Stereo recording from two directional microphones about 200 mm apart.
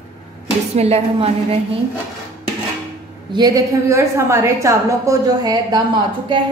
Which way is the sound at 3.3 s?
20° right (ahead or behind).